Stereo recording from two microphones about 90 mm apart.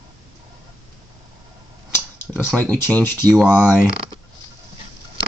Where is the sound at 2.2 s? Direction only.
25° left (ahead or behind).